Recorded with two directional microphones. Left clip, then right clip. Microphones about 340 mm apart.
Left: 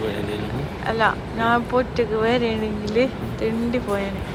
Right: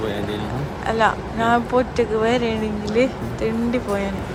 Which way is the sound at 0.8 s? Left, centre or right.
Centre.